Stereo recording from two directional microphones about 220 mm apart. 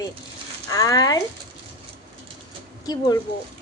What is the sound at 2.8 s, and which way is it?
Speech, 15° left (ahead or behind).